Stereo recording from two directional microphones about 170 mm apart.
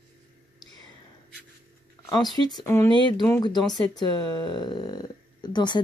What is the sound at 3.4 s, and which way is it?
Speech, 25° left (ahead or behind).